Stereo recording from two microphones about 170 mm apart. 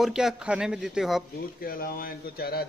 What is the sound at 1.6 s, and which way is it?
Speech, 60° left (ahead or behind).